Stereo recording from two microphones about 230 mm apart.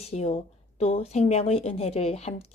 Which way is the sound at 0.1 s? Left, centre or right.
Left.